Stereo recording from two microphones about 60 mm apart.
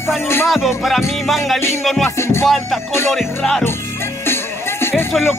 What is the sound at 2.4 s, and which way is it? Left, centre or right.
Music, centre.